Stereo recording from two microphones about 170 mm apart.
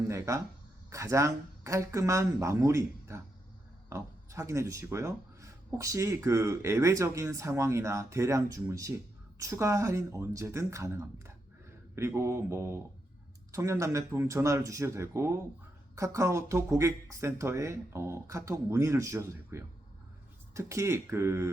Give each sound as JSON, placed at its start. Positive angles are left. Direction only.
{"t": 0.1, "sound": "speech", "side_deg": -15}